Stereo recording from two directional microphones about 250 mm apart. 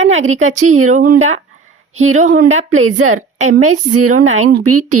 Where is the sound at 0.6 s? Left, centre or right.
Right.